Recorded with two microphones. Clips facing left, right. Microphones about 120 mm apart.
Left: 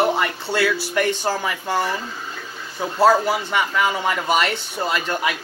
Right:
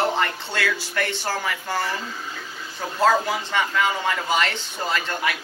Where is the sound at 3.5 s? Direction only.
15° left (ahead or behind).